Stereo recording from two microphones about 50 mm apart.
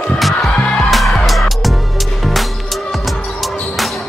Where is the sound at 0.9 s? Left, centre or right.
Centre.